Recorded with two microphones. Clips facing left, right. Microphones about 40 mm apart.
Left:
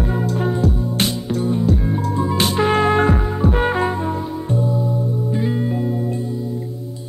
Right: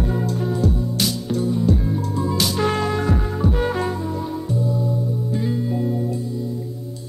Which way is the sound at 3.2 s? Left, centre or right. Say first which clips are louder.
Left 3 dB; centre.